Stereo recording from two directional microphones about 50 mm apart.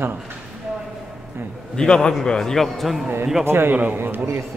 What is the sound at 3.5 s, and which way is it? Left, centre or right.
Speech, right.